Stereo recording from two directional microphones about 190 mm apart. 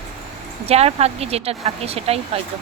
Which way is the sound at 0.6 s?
35° right (ahead or behind).